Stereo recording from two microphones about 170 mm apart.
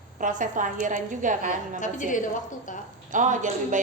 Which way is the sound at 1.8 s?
50° left (ahead or behind).